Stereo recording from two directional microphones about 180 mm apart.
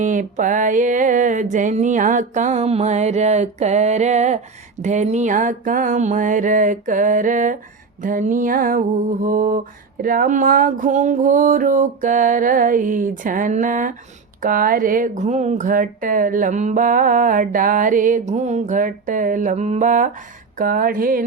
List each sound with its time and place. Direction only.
0.0 s speech: 45° right (ahead or behind)